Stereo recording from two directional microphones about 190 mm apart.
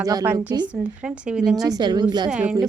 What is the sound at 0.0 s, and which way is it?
Speech, 20° right (ahead or behind).